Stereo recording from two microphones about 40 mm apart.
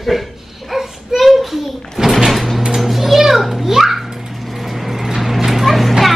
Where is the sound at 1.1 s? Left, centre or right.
Centre.